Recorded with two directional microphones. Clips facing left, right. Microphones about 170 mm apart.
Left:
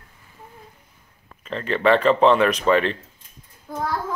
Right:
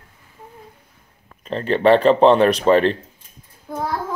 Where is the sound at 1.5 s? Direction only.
35° right (ahead or behind).